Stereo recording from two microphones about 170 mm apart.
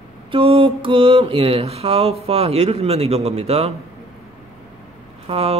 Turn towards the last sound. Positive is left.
turn(degrees=-35)  # may be behind; listen again after turning